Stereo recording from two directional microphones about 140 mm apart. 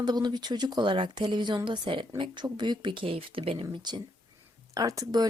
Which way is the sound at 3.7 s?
30° right (ahead or behind).